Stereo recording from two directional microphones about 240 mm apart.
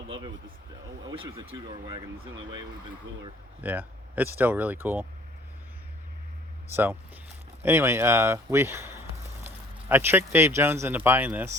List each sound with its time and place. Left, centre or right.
1.2 s speech: right
3.6 s speech: centre
7.6 s speech: centre